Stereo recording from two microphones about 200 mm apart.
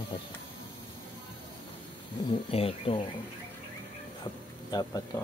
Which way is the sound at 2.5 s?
25° left (ahead or behind).